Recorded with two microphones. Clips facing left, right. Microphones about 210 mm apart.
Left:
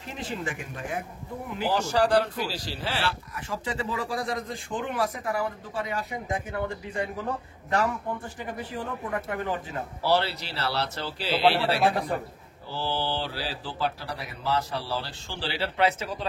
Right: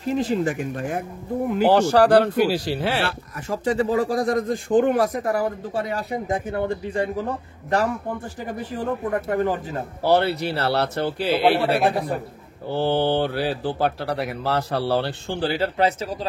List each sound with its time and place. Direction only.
0.0 s speech: 40° right (ahead or behind)
1.5 s speech: 65° right (ahead or behind); by 7.1 s 30° right (ahead or behind)
8.7 s speech: 40° right (ahead or behind)